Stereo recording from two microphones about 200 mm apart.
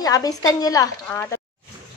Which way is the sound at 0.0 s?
20° left (ahead or behind).